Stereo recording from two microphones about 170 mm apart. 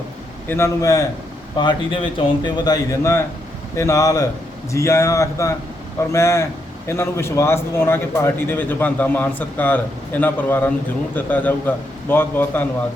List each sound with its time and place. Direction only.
0.4 s a man's voice: 15° left (ahead or behind)
1.5 s a man's voice: 30° left (ahead or behind); by 12.6 s 10° left (ahead or behind)